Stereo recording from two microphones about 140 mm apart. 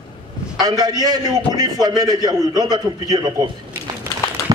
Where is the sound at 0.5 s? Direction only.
30° right (ahead or behind).